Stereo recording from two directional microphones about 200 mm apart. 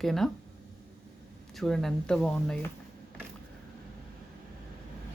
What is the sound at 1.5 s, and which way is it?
Speech, centre (ahead or behind).